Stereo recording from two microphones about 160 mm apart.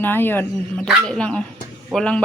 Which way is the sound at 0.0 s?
10° left (ahead or behind).